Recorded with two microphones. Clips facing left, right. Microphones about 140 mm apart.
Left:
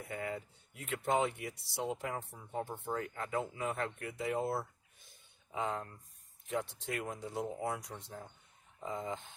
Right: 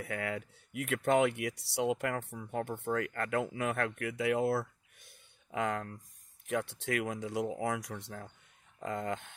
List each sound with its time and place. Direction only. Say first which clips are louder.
0.0 s speech: right 3 dB; 90° right; by 9.3 s 70° right (ahead or behind)